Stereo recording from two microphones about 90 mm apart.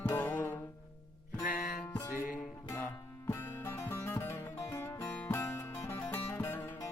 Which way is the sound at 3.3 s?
25° left (ahead or behind).